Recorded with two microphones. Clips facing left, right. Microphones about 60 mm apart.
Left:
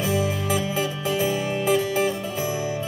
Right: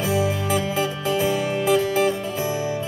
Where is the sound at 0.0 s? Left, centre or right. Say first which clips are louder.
Right 2 dB; right.